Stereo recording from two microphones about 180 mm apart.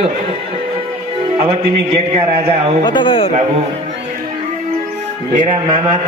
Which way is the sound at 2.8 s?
25° left (ahead or behind).